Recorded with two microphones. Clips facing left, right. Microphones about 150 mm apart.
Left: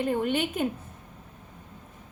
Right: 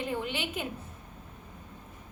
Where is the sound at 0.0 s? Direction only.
50° left (ahead or behind).